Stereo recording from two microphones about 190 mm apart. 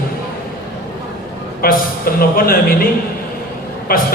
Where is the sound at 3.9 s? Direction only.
50° left (ahead or behind).